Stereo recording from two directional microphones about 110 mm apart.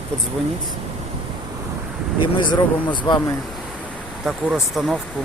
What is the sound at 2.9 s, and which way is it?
Speech, 45° left (ahead or behind).